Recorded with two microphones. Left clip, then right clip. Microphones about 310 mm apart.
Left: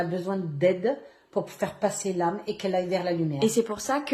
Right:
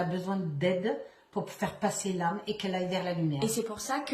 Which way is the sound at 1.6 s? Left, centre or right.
Right.